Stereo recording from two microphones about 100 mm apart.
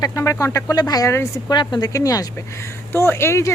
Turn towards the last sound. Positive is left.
turn(degrees=25)  # may be behind; listen again after turning